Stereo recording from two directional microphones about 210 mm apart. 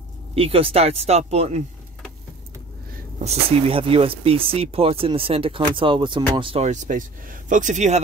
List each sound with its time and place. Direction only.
0.3 s speech: 25° right (ahead or behind)
3.2 s speech: 30° right (ahead or behind)